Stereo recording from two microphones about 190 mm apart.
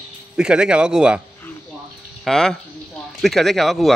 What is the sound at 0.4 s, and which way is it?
Speech, 5° right (ahead or behind).